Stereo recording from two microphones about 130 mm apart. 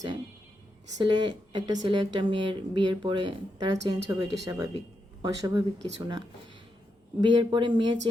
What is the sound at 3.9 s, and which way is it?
Speech, 25° right (ahead or behind).